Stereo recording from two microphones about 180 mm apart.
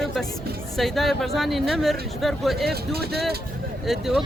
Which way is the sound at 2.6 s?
60° right (ahead or behind).